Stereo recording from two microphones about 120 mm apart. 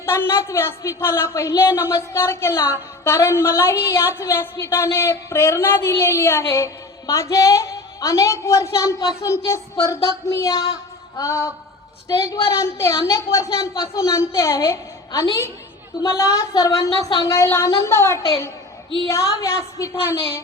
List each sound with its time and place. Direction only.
0.0 s a woman's voice: 20° left (ahead or behind)